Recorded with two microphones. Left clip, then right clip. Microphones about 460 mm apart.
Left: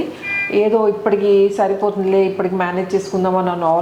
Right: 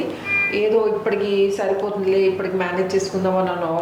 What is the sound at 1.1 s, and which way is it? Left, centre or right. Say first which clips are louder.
A woman's voice: left 6 dB; left.